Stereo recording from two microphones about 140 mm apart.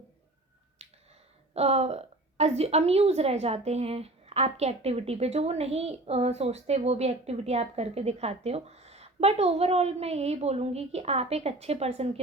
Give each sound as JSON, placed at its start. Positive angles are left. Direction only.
{"t": 0.8, "sound": "finger snapping", "side_deg": -50}
{"t": 1.5, "sound": "a woman's voice", "side_deg": -50}